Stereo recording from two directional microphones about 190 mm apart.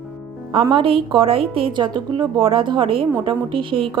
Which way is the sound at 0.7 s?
30° right (ahead or behind).